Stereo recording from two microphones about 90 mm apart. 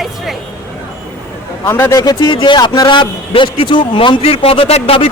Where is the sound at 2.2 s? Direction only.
60° left (ahead or behind); by 5.0 s 85° left.